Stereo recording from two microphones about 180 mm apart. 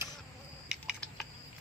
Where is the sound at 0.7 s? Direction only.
Centre (ahead or behind).